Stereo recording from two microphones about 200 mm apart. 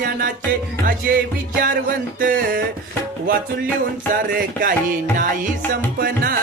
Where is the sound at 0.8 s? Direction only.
45° right (ahead or behind).